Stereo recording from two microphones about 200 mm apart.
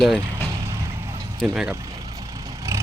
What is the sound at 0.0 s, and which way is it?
Speech, centre (ahead or behind).